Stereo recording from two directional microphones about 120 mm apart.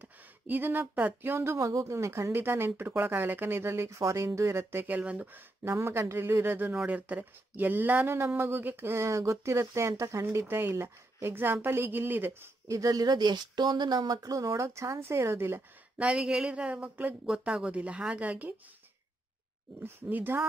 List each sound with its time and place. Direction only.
0.0 s speech: 15° right (ahead or behind)
19.8 s speech: 15° right (ahead or behind)